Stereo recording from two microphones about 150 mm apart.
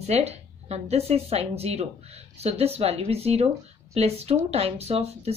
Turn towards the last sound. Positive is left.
turn(degrees=-45)  # may be behind; listen again after turning